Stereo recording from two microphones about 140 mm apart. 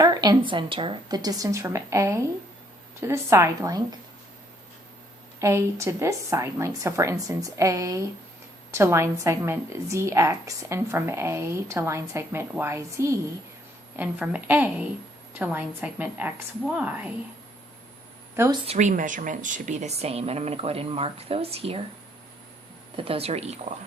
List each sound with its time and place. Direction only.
0.0 s a woman's voice: 30° right (ahead or behind)
5.4 s a woman's voice: 20° right (ahead or behind)
18.6 s a woman's voice: 50° right (ahead or behind)
23.0 s a woman's voice: 45° right (ahead or behind)